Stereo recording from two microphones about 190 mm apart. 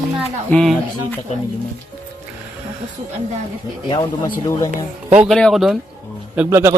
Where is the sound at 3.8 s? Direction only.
20° left (ahead or behind).